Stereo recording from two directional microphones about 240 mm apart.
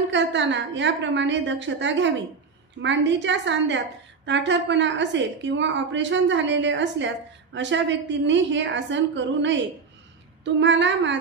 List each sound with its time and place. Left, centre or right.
0.1 s a woman's voice: right